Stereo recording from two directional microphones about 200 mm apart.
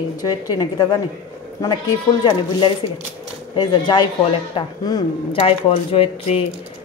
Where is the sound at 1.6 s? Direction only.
20° left (ahead or behind).